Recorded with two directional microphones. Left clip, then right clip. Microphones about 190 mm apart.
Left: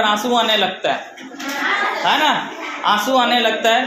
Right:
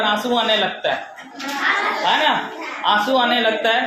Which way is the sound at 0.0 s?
35° left (ahead or behind).